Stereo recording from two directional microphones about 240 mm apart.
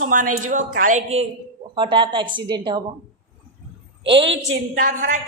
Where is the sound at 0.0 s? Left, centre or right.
Right.